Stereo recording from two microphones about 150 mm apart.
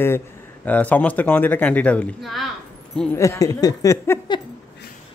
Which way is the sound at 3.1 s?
20° left (ahead or behind).